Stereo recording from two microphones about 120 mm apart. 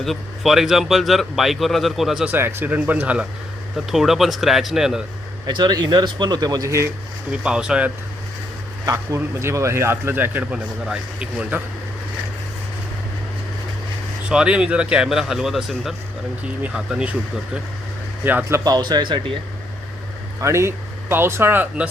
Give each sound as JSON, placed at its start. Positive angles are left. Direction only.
{"t": 0.0, "sound": "a man's voice", "side_deg": 0}
{"t": 2.2, "sound": "a man's voice", "side_deg": -15}
{"t": 5.5, "sound": "speech", "side_deg": -35}
{"t": 7.3, "sound": "speech", "side_deg": -5}
{"t": 8.9, "sound": "speech", "side_deg": -25}
{"t": 14.3, "sound": "a man's voice", "side_deg": -5}
{"t": 18.2, "sound": "speech", "side_deg": -15}
{"t": 18.6, "sound": "speech", "side_deg": -35}
{"t": 20.4, "sound": "speech", "side_deg": -25}